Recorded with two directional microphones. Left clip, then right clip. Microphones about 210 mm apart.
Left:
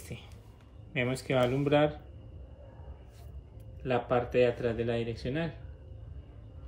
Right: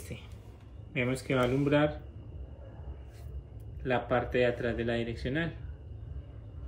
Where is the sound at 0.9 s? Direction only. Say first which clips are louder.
Even; 25° left (ahead or behind).